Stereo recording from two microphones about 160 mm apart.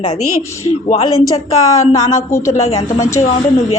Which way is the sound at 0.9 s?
40° left (ahead or behind).